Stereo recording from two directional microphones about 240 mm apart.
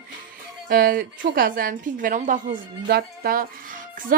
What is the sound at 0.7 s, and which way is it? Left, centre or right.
A woman's voice, right.